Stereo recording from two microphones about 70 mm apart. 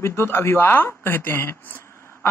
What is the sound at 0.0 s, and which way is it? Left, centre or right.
Speech, left.